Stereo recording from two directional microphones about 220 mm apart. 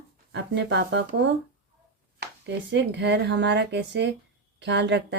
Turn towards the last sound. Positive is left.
turn(degrees=-50)  # may be behind; listen again after turning